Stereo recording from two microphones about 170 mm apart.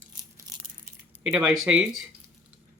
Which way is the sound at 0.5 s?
20° right (ahead or behind).